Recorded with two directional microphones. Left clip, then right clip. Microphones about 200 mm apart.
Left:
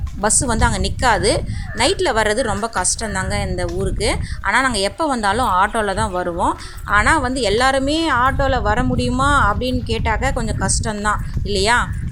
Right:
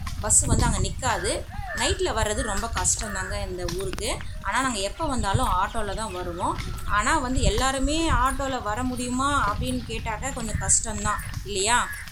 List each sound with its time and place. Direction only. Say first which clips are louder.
0.2 s a woman's voice: left 8 dB; 35° left (ahead or behind)